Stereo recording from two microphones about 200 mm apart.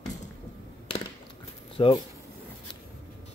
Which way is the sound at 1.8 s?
25° left (ahead or behind).